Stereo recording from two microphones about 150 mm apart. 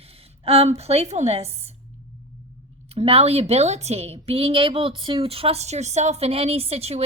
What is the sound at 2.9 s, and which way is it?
A woman's voice, 40° right (ahead or behind).